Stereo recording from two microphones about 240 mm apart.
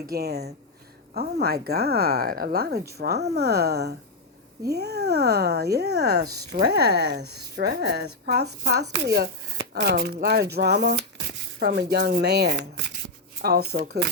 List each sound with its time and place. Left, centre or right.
0.1 s speech: right